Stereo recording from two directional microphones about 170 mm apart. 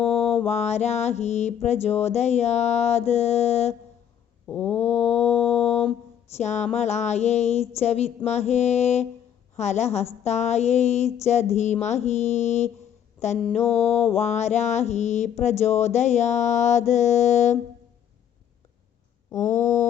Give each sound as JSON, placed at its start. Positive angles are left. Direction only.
{"t": 0.0, "sound": "mantra", "side_deg": 40}
{"t": 4.4, "sound": "mantra", "side_deg": 10}
{"t": 4.8, "sound": "mantra", "side_deg": 40}
{"t": 19.4, "sound": "mantra", "side_deg": 45}